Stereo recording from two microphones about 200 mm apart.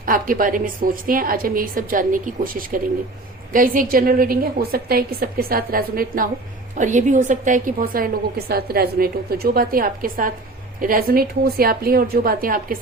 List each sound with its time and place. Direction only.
0.0 s a woman's voice: 45° right (ahead or behind)